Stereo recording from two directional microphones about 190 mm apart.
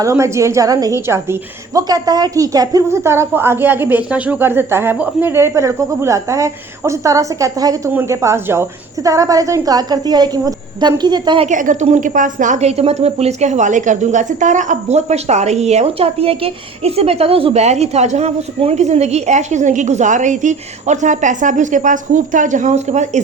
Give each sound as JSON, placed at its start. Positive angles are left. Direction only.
{"t": 0.0, "sound": "a woman's voice", "side_deg": -15}
{"t": 11.4, "sound": "a woman's voice", "side_deg": -40}